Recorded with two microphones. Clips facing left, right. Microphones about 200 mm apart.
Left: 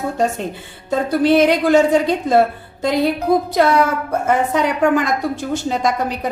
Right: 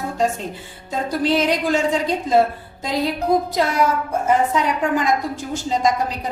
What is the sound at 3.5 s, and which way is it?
Speech, 65° left (ahead or behind).